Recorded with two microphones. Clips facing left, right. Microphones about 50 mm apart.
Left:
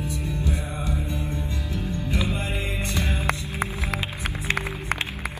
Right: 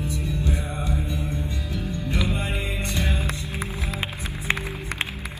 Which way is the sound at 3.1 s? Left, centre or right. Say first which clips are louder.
Left 2 dB; left.